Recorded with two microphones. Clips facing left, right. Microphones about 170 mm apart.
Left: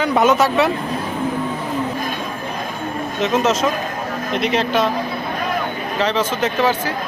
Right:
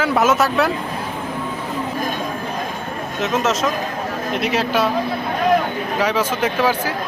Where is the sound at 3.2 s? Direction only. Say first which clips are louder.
Left 2 dB; centre (ahead or behind).